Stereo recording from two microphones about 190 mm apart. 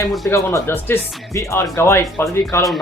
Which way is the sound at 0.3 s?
15° left (ahead or behind).